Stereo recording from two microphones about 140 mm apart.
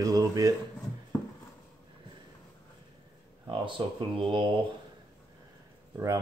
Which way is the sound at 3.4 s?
35° right (ahead or behind).